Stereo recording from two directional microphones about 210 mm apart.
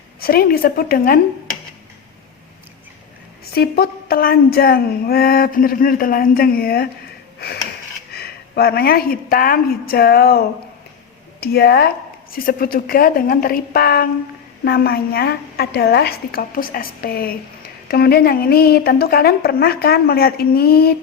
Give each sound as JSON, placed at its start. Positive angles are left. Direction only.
{"t": 0.2, "sound": "speech", "side_deg": 45}
{"t": 3.5, "sound": "speech", "side_deg": 50}
{"t": 7.3, "sound": "a sound", "side_deg": 50}
{"t": 8.1, "sound": "a woman's voice", "side_deg": 50}